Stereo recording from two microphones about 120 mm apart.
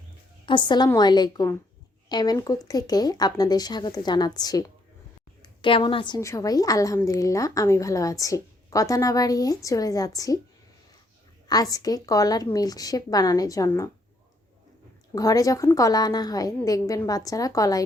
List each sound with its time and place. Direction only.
0.4 s a woman's voice: 40° left (ahead or behind)
6.1 s a woman's voice: 25° left (ahead or behind)
11.4 s a woman's voice: 30° left (ahead or behind)
15.1 s a woman's voice: 30° left (ahead or behind)